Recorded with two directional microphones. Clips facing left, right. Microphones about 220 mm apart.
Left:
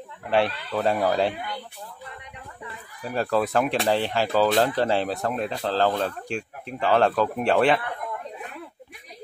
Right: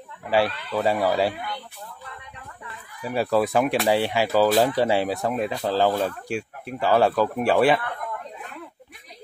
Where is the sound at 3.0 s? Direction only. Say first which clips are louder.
Right 2 dB; 10° right (ahead or behind).